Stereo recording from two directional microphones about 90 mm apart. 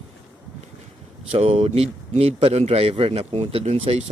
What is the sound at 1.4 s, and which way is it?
Speech, 90° right.